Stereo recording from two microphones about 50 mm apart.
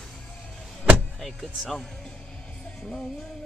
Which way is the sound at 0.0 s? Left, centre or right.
Centre.